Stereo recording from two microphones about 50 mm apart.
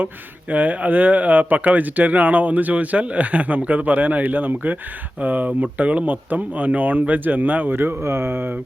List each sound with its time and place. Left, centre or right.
0.5 s speech: right
8.0 s speech: right